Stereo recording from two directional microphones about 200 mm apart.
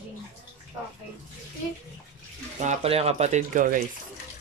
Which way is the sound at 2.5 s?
35° right (ahead or behind).